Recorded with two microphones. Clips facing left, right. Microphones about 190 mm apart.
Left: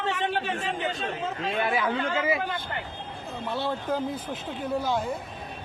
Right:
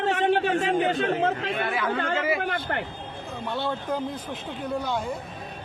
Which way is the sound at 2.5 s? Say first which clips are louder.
Right 4 dB; 55° right (ahead or behind).